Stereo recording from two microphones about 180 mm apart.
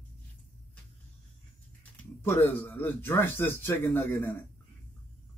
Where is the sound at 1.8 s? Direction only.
10° left (ahead or behind).